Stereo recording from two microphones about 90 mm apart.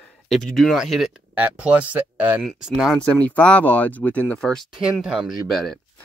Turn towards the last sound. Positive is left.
turn(degrees=5)  # may be behind; listen again after turning